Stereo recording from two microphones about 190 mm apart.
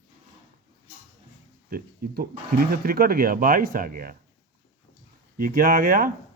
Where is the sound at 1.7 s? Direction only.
55° right (ahead or behind).